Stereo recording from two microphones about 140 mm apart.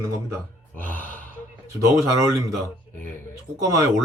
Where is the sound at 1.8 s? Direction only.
25° right (ahead or behind).